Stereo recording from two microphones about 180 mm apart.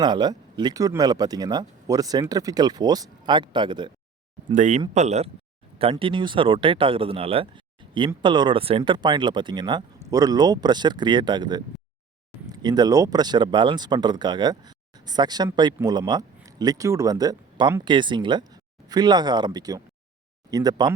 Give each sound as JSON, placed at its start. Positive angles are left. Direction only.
{"t": 0.0, "sound": "speech", "side_deg": -25}
{"t": 4.5, "sound": "speech", "side_deg": -40}